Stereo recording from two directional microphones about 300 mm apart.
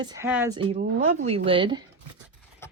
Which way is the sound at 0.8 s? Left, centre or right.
Right.